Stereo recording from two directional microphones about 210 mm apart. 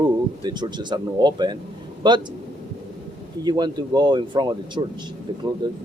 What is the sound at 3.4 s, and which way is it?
Speech, 20° right (ahead or behind).